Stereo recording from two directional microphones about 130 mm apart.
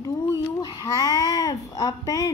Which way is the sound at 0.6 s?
30° left (ahead or behind).